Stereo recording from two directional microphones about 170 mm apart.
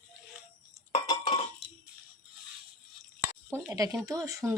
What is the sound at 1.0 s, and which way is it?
Dishes, 35° left (ahead or behind).